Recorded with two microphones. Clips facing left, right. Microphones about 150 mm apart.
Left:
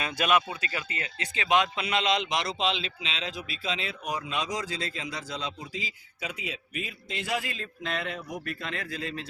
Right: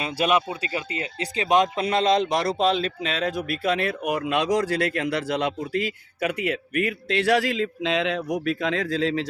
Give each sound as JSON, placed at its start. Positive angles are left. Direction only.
{"t": 0.0, "sound": "speech", "side_deg": -25}